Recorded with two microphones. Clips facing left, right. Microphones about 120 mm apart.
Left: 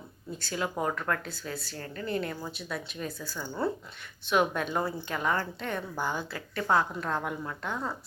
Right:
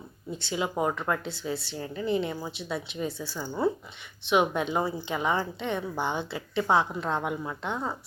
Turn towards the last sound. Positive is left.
turn(degrees=-20)  # may be behind; listen again after turning